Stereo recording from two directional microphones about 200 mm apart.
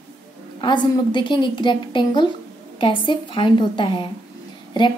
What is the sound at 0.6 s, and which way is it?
Speech, 25° left (ahead or behind).